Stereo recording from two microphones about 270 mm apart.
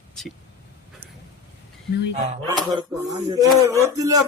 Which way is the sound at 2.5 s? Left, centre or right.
Centre.